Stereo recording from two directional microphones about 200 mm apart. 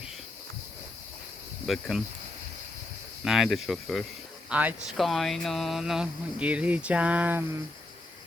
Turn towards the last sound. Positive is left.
turn(degrees=-10)  # may be behind; listen again after turning